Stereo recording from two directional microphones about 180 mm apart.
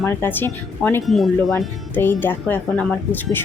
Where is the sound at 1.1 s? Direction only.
Centre (ahead or behind).